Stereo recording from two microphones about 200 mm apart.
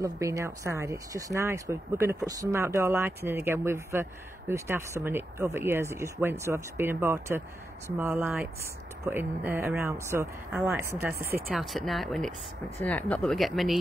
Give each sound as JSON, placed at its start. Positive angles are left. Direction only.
{"t": 0.0, "sound": "speech", "side_deg": -15}
{"t": 11.5, "sound": "speech", "side_deg": 0}